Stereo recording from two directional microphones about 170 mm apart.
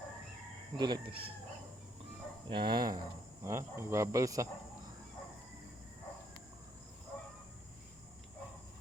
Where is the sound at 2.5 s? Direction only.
25° right (ahead or behind).